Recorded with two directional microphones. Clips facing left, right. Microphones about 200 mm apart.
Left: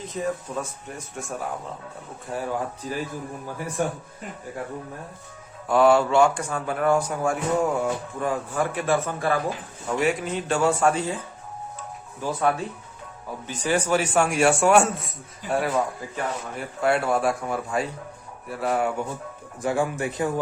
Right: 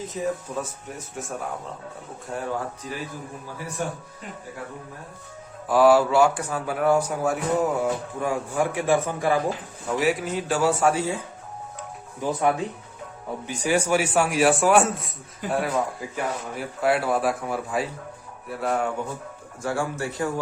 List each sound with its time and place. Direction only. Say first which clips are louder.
0.2 s a man's voice: even; 5° right (ahead or behind)
2.8 s speech: left 4 dB; 35° left (ahead or behind)
5.6 s a man's voice: right 1 dB; 5° right (ahead or behind)
10.0 s a man's voice: even; 5° right (ahead or behind)
12.2 s a man's voice: right 1 dB; 15° right (ahead or behind); by 18.9 s 5° left (ahead or behind)
19.6 s a man's voice: left 3 dB; 15° left (ahead or behind)